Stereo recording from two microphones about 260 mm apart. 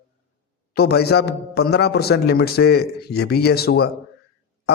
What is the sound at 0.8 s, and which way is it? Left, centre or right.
A man's voice, left.